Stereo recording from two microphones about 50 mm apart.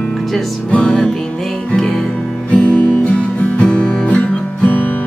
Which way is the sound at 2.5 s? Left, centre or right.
Left.